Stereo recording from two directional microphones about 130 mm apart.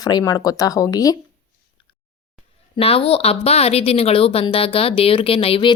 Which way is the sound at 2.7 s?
50° left (ahead or behind).